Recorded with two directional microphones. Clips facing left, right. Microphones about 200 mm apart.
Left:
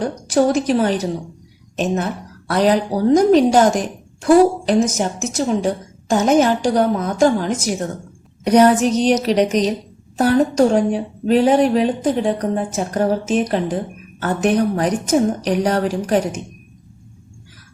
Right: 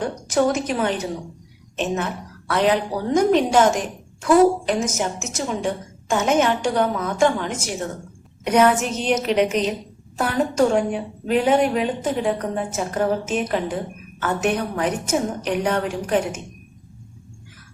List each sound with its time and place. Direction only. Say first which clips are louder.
0.0 s a woman's voice: left 4 dB; 35° left (ahead or behind)